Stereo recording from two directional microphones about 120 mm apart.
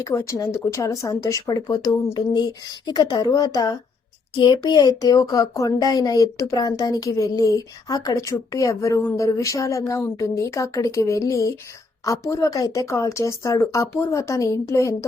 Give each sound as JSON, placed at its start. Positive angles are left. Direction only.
{"t": 0.0, "sound": "a woman's voice", "side_deg": 25}